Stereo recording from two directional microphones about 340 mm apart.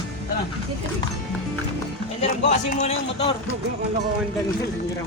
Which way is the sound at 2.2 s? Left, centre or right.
Left.